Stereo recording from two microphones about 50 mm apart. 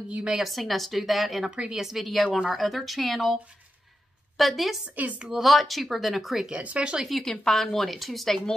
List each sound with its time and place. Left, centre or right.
0.2 s a woman's voice: centre
0.5 s speech: centre
1.5 s a woman's voice: centre
2.0 s speech: centre
4.4 s speech: centre
4.8 s a woman's voice: right
5.4 s speech: centre
6.4 s speech: right
7.2 s speech: centre